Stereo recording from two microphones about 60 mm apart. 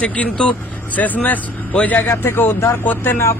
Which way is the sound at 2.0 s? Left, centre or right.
Left.